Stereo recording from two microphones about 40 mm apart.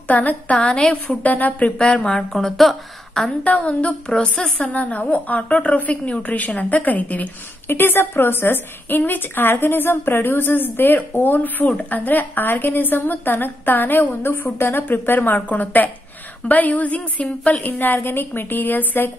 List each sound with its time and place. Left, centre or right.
0.1 s a woman's voice: left
1.8 s a woman's voice: left
2.3 s speech: centre
3.4 s a woman's voice: left
4.1 s speech: centre
4.6 s a woman's voice: left
7.6 s a woman's voice: left
15.3 s a woman's voice: left
17.9 s a woman's voice: left